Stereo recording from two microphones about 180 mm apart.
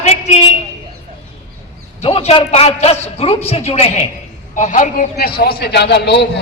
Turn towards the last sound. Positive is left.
turn(degrees=70)  # may be behind; listen again after turning